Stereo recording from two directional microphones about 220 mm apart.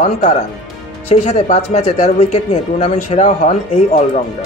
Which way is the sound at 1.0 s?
30° left (ahead or behind).